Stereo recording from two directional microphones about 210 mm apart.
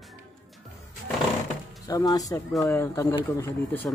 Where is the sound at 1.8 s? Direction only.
20° left (ahead or behind).